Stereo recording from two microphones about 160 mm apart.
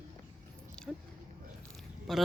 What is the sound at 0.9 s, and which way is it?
Biting, 5° right (ahead or behind).